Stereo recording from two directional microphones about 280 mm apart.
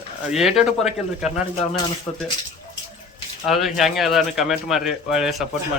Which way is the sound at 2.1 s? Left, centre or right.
Centre.